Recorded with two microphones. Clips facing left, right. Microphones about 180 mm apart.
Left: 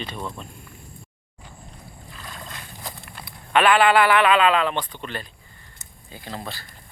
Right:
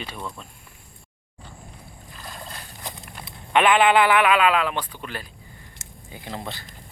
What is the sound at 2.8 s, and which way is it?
Speech, 20° right (ahead or behind).